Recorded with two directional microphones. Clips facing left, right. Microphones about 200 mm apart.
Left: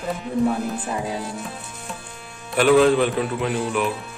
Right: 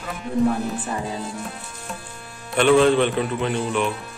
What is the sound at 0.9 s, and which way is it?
Speech, 10° left (ahead or behind).